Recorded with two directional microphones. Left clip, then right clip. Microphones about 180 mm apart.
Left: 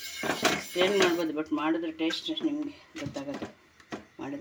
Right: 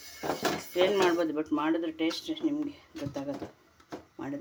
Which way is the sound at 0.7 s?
Centre (ahead or behind).